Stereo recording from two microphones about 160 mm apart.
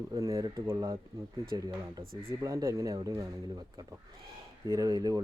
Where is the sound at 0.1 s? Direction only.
20° right (ahead or behind).